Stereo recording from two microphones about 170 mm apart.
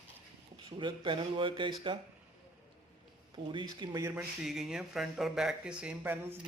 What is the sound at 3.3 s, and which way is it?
Speech, 30° right (ahead or behind).